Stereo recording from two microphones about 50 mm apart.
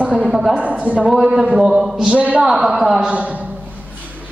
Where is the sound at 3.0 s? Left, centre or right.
Right.